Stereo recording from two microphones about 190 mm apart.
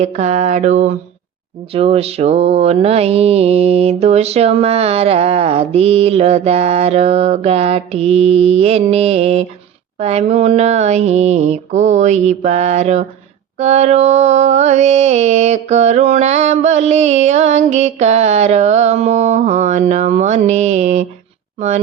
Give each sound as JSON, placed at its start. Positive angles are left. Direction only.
{"t": 0.0, "sound": "mantra", "side_deg": -35}